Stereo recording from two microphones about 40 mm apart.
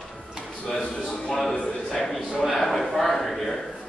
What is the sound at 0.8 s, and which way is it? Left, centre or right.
Speech, left.